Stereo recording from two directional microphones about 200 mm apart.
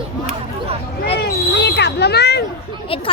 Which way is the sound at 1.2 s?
55° left (ahead or behind).